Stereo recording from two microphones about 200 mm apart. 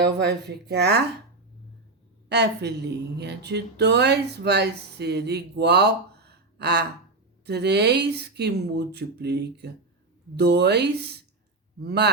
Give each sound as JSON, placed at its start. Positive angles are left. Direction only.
{"t": 0.0, "sound": "speech", "side_deg": -55}
{"t": 2.3, "sound": "speech", "side_deg": -55}